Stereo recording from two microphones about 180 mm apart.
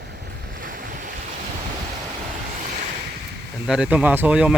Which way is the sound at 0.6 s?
50° right (ahead or behind).